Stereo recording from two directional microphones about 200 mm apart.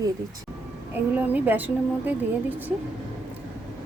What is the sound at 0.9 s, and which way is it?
A woman's voice, 10° right (ahead or behind).